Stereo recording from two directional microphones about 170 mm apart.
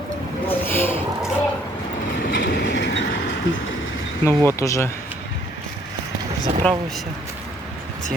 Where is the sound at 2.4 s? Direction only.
80° left.